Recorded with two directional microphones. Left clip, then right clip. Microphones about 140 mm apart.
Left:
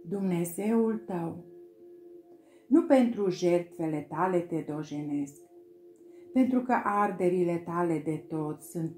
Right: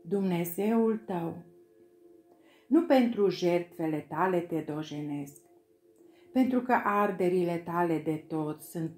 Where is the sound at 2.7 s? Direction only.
30° right (ahead or behind).